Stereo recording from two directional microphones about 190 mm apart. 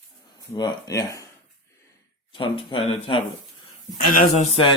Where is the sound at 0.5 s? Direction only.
20° left (ahead or behind).